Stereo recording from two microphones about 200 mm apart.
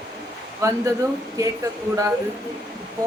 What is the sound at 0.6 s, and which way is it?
A man's voice, 15° right (ahead or behind).